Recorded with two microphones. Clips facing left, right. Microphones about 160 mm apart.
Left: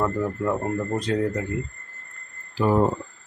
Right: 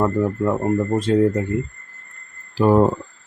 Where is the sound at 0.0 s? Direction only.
25° right (ahead or behind).